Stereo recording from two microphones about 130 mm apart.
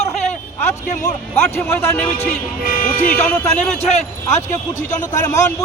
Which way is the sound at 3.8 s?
60° left (ahead or behind).